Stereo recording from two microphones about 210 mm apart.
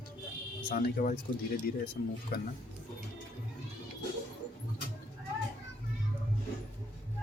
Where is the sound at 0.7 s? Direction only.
40° left (ahead or behind).